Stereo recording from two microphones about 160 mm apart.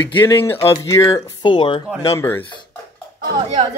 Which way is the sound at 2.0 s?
15° left (ahead or behind).